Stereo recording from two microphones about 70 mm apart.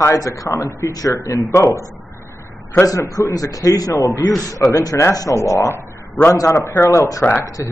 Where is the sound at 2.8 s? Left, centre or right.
Left.